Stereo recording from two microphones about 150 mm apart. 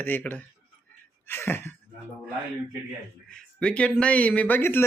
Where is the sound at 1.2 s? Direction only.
15° left (ahead or behind).